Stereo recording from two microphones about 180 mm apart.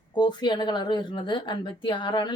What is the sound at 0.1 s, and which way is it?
Speech, 25° left (ahead or behind).